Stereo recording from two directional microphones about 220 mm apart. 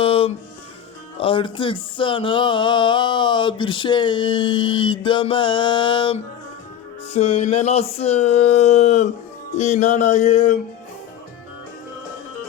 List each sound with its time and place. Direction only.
0.0 s music: 25° left (ahead or behind)
1.2 s a sound: 25° left (ahead or behind)
9.6 s music: 30° left (ahead or behind)